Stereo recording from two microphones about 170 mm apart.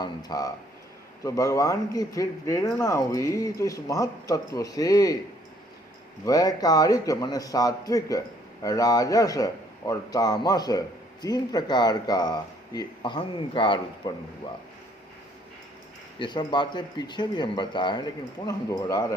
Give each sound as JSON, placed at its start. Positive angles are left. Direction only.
{"t": 0.0, "sound": "a man's voice", "side_deg": 25}
{"t": 6.2, "sound": "a man's voice", "side_deg": 20}
{"t": 16.1, "sound": "a man's voice", "side_deg": 25}